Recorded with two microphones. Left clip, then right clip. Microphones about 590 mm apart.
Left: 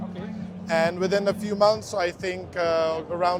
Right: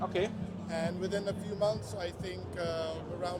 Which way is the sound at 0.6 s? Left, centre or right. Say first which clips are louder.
Left 13 dB; left.